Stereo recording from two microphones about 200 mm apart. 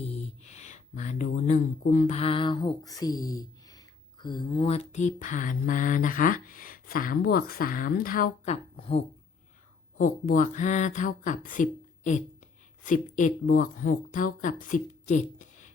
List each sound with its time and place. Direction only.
0.0 s speech: 30° left (ahead or behind)
10.0 s speech: 40° left (ahead or behind)